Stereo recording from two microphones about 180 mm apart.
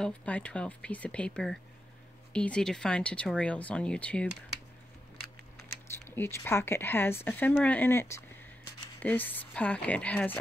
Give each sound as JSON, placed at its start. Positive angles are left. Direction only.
{"t": 0.0, "sound": "speech", "side_deg": 5}
{"t": 5.9, "sound": "speech", "side_deg": 10}